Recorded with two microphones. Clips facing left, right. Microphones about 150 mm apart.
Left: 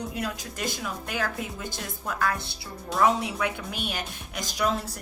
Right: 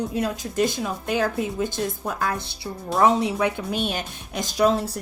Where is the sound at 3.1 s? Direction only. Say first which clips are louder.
Right 6 dB; 25° right (ahead or behind).